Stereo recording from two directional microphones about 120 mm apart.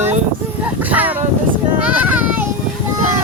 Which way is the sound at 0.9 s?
15° right (ahead or behind).